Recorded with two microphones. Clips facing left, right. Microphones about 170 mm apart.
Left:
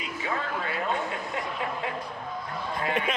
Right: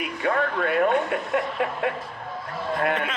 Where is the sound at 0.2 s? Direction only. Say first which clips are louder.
Right 8 dB; 65° right (ahead or behind).